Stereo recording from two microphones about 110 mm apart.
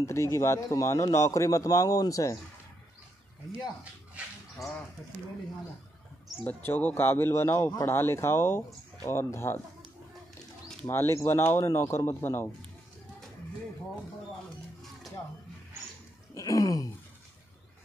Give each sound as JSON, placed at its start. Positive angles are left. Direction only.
{"t": 0.0, "sound": "a man's voice", "side_deg": 25}
{"t": 6.4, "sound": "a man's voice", "side_deg": 15}
{"t": 10.9, "sound": "a man's voice", "side_deg": 25}
{"t": 16.3, "sound": "a sound", "side_deg": 30}